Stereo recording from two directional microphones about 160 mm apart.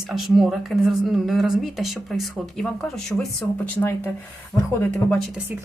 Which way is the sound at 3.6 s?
10° left (ahead or behind).